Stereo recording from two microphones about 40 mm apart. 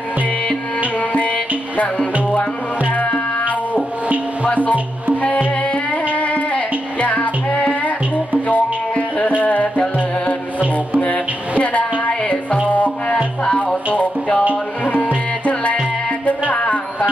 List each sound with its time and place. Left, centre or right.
1.1 s music: left
2.9 s music: left
5.2 s music: left
12.0 s music: left
15.4 s tabla: left
16.3 s music: left